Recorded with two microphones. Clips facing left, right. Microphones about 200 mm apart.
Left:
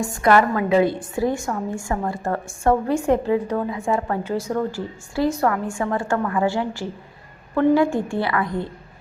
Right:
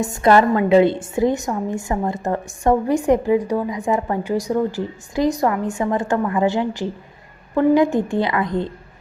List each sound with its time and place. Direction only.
0.0 s a woman's voice: 20° right (ahead or behind)